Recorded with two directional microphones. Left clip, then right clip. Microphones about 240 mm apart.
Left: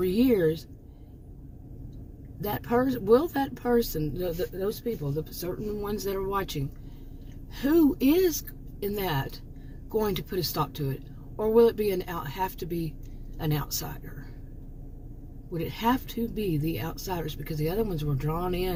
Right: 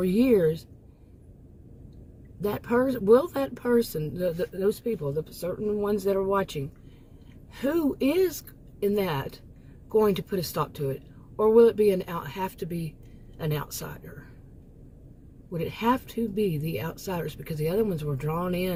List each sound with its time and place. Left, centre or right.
0.0 s speech: right
2.4 s speech: right
15.5 s speech: right